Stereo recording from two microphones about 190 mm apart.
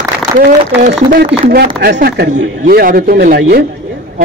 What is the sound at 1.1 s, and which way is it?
Speech, 55° right (ahead or behind).